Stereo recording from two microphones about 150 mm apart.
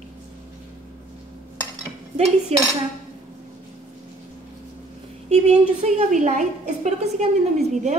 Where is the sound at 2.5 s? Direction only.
40° right (ahead or behind).